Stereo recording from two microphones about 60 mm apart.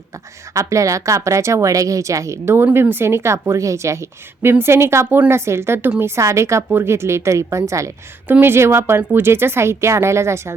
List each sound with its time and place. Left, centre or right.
0.5 s a woman's voice: right
4.5 s a woman's voice: right
6.7 s a woman's voice: right
8.3 s a woman's voice: right